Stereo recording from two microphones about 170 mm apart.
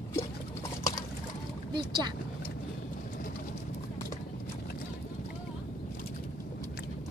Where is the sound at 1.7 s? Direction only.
25° right (ahead or behind).